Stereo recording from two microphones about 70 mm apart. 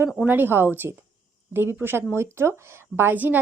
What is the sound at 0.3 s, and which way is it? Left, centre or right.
A woman's voice, right.